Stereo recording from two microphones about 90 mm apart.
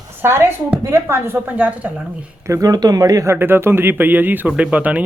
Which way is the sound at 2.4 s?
40° right (ahead or behind).